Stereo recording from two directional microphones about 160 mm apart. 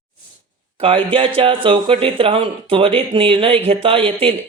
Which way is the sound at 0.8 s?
35° right (ahead or behind).